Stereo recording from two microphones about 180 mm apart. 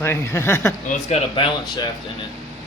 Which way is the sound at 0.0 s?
15° left (ahead or behind).